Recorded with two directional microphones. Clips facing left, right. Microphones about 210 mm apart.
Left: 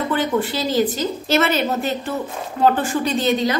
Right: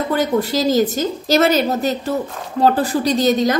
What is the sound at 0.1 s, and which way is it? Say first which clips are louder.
A woman's voice: right 4 dB; 40° right (ahead or behind).